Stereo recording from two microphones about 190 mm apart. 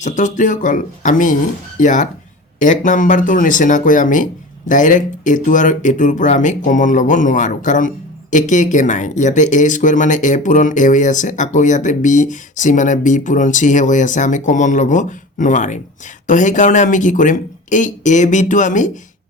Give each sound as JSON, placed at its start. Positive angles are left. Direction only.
{"t": 0.0, "sound": "speech", "side_deg": 40}